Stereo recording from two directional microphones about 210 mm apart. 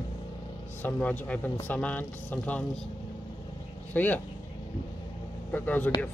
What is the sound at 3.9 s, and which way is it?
Speech, 10° left (ahead or behind).